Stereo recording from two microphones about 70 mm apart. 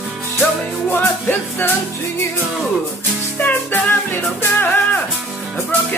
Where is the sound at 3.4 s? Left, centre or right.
Left.